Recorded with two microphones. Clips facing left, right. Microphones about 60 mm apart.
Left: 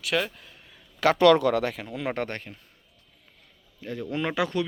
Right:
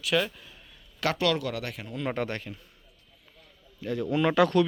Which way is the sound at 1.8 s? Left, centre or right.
Left.